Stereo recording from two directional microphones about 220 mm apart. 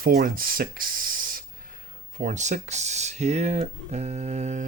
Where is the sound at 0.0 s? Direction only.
40° right (ahead or behind).